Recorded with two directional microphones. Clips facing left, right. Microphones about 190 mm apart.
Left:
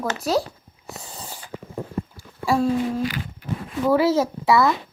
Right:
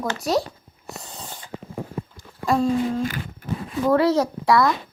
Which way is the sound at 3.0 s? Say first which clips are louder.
Left 1 dB; 45° right (ahead or behind).